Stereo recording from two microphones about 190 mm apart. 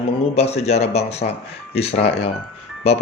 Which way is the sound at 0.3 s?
35° left (ahead or behind).